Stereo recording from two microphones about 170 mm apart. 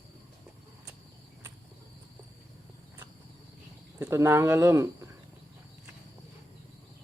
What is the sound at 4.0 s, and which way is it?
Speech, 15° right (ahead or behind).